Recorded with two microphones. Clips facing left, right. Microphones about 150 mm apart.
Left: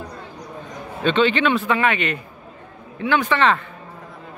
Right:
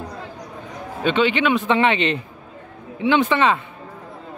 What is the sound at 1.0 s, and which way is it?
Speech, 10° right (ahead or behind).